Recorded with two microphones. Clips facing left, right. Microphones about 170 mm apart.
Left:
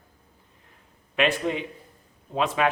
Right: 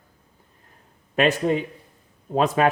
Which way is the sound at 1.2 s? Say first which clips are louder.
Right 4 dB; 40° right (ahead or behind).